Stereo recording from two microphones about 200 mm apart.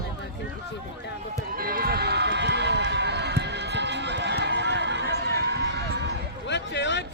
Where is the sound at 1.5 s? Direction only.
50° right (ahead or behind).